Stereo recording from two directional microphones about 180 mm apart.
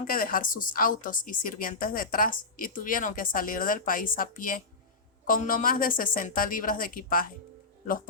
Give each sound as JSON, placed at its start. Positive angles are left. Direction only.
{"t": 0.1, "sound": "a woman's voice", "side_deg": 50}